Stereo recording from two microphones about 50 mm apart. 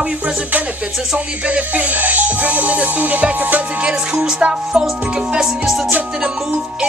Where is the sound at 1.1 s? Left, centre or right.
Right.